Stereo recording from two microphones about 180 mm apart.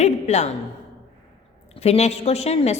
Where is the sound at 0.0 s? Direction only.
40° left (ahead or behind).